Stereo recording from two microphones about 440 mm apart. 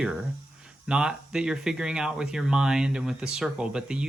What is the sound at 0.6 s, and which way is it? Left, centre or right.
Speech, centre.